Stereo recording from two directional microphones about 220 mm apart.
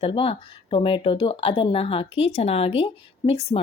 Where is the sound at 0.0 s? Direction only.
25° left (ahead or behind).